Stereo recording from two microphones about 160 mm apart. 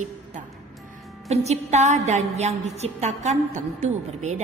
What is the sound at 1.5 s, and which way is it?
A woman's voice, 45° right (ahead or behind).